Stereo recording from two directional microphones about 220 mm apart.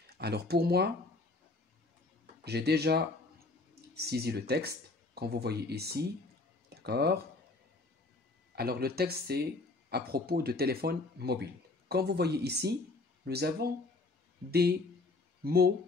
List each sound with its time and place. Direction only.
0.2 s speech: 45° right (ahead or behind)
2.4 s speech: 45° right (ahead or behind)
6.7 s a sound: 45° right (ahead or behind)
8.5 s speech: 45° right (ahead or behind)